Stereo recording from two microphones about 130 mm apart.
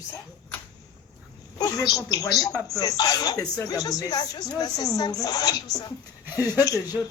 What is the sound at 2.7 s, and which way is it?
Speech, 30° left (ahead or behind).